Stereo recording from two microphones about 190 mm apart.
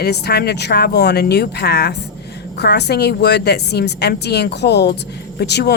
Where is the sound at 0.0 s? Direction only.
60° left (ahead or behind).